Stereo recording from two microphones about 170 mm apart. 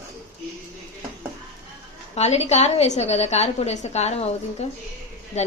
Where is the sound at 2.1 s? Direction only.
40° left (ahead or behind).